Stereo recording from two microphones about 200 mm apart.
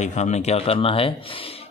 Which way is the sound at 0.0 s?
35° left (ahead or behind).